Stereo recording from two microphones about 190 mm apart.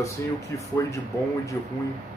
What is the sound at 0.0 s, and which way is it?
Speech, 15° left (ahead or behind).